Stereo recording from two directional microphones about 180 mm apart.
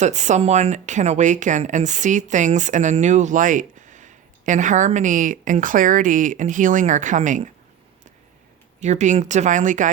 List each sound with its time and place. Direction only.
0.0 s a woman's voice: 40° right (ahead or behind)
8.8 s speech: 40° right (ahead or behind)